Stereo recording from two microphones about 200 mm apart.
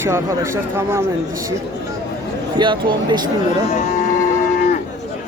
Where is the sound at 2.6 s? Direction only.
25° right (ahead or behind).